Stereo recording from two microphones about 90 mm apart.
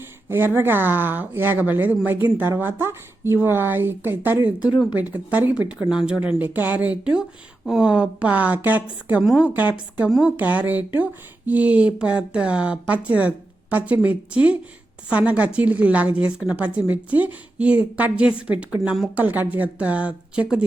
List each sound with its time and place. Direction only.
0.3 s speech: 25° right (ahead or behind)
10.1 s speech: 5° right (ahead or behind)
10.3 s speech: 15° right (ahead or behind)